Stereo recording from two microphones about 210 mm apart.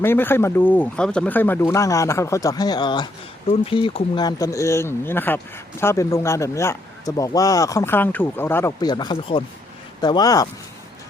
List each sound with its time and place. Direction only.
0.0 s speech: 10° left (ahead or behind)